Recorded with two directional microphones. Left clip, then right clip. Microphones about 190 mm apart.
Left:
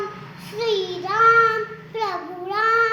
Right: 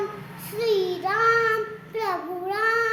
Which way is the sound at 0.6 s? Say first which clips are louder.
Even; 20° right (ahead or behind).